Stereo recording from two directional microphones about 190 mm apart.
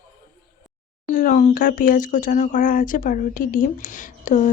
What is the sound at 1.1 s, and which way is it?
Speech, 45° left (ahead or behind).